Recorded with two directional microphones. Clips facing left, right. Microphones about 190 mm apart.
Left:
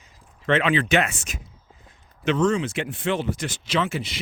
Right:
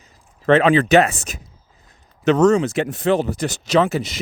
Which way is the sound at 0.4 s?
40° right (ahead or behind).